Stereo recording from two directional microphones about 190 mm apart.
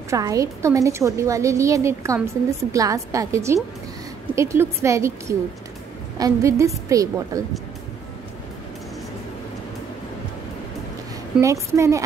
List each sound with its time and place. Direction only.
0.1 s a woman's voice: 15° right (ahead or behind)
11.4 s a woman's voice: 15° right (ahead or behind)